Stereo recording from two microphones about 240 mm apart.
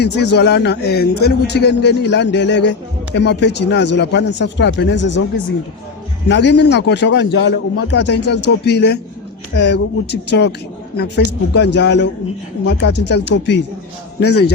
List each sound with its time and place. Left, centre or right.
0.0 s a man's voice: left
6.2 s a man's voice: left